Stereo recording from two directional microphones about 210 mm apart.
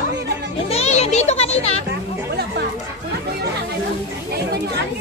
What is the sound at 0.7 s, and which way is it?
Music, 30° left (ahead or behind).